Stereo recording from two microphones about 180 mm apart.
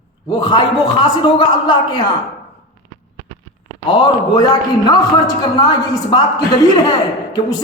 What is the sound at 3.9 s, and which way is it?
A woman's voice, 25° left (ahead or behind).